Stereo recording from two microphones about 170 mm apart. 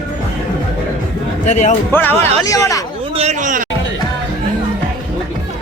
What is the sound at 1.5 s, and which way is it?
Speech, 45° left (ahead or behind).